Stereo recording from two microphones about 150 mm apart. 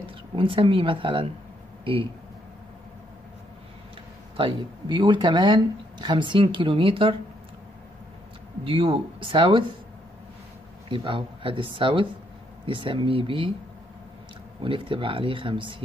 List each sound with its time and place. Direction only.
0.4 s speech: 35° right (ahead or behind)
4.4 s speech: 30° right (ahead or behind)
8.6 s speech: 35° right (ahead or behind)
10.9 s speech: 35° right (ahead or behind)
14.6 s speech: 35° right (ahead or behind)